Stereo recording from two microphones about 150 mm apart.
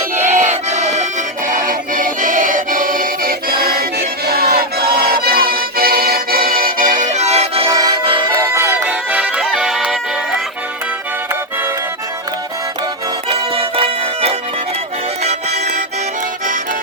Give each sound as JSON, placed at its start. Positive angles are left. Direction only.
{"t": 0.2, "sound": "music", "side_deg": -55}
{"t": 7.7, "sound": "accordion", "side_deg": -25}
{"t": 8.4, "sound": "music", "side_deg": -20}
{"t": 13.6, "sound": "music", "side_deg": -40}